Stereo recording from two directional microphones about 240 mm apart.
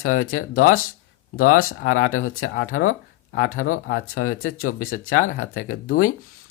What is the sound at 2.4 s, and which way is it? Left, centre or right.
Speech, left.